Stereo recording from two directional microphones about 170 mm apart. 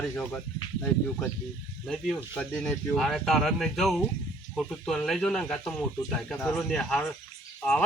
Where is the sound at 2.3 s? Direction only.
5° left (ahead or behind).